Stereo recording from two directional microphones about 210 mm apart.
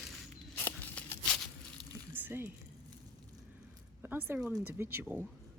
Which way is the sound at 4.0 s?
10° right (ahead or behind).